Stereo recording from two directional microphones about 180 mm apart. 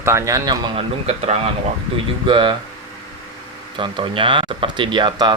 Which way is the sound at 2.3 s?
25° right (ahead or behind).